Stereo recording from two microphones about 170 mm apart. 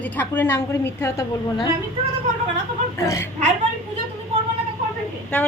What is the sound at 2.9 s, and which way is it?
Speech, 20° left (ahead or behind).